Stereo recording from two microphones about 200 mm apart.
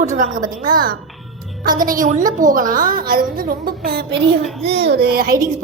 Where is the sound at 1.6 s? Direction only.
45° right (ahead or behind).